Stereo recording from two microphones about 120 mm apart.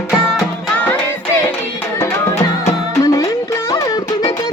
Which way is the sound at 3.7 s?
30° left (ahead or behind).